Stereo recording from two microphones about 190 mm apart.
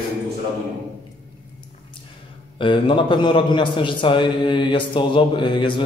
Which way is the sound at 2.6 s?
25° left (ahead or behind).